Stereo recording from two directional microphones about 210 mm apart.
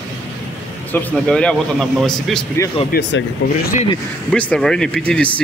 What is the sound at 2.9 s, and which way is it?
Speech, 55° left (ahead or behind).